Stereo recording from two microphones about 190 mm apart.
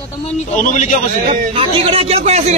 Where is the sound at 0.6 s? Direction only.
45° left (ahead or behind).